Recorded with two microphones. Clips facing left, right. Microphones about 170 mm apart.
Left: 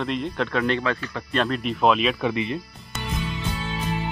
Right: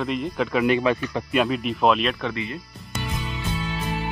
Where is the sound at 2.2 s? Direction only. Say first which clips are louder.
Left 4 dB; 20° left (ahead or behind).